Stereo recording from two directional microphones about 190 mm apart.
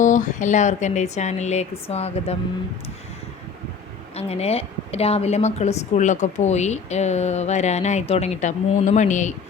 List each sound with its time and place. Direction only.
0.0 s a woman's voice: 40° left (ahead or behind)
4.1 s a woman's voice: 35° left (ahead or behind)